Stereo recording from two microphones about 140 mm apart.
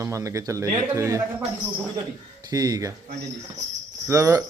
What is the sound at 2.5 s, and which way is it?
Speech, 25° right (ahead or behind).